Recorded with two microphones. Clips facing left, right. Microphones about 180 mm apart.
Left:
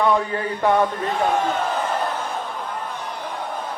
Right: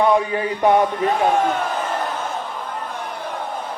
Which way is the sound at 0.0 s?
15° right (ahead or behind).